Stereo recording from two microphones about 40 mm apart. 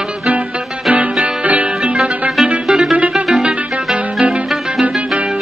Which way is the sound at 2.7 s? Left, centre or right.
Centre.